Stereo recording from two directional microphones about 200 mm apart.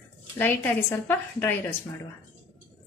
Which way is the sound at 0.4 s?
10° left (ahead or behind).